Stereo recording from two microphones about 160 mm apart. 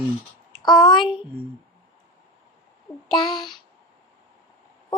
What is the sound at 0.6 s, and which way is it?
Speech, 30° left (ahead or behind).